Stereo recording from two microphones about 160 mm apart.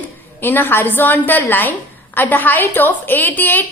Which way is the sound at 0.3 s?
10° left (ahead or behind).